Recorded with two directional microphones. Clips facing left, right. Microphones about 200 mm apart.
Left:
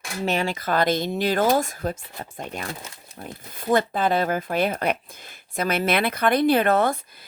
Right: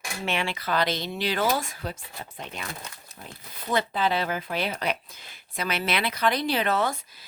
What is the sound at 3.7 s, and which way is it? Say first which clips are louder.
Speech: left 5 dB; 50° left (ahead or behind).